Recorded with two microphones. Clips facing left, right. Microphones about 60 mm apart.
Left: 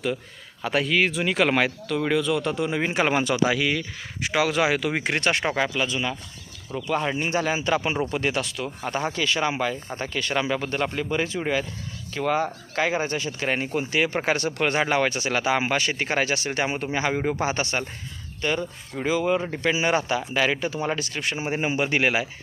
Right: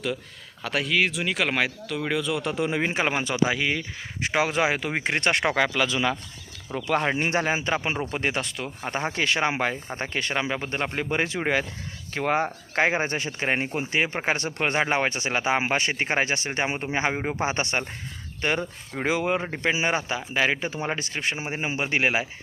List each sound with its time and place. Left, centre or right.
0.6 s speech: centre; by 3.8 s right
4.2 s speech: right
5.5 s speech: right
5.9 s speech: right
7.0 s speech: right
7.4 s speech: right
10.3 s speech: centre
10.9 s speech: right; by 16.9 s centre
16.9 s speech: right
18.4 s speech: right
19.0 s speech: right
19.4 s speech: right